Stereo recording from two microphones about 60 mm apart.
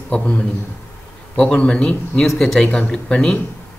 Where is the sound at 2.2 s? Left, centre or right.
Centre.